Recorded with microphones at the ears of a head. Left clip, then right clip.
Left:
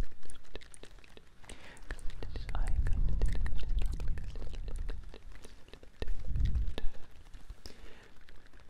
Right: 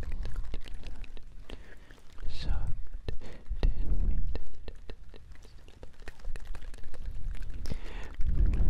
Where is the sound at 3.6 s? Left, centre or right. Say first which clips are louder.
Right 7 dB; right.